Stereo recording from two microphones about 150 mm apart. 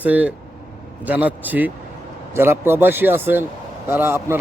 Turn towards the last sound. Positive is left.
turn(degrees=-15)  # may be behind; listen again after turning